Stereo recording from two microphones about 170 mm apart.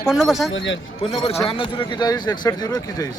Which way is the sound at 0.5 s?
90° left.